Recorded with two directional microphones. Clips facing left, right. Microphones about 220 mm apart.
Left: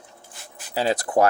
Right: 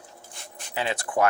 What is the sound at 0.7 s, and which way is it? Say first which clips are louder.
Speech: left 6 dB; 35° left (ahead or behind).